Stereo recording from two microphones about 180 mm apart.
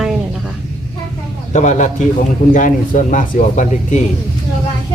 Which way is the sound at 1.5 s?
45° left (ahead or behind).